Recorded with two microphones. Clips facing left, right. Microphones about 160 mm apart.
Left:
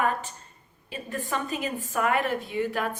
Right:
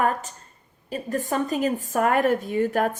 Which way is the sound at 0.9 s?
40° right (ahead or behind).